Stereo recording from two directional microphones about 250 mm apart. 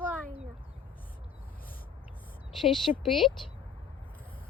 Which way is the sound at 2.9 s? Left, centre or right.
Left.